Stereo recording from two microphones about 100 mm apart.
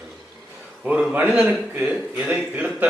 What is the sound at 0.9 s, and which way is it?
Speech, 10° right (ahead or behind).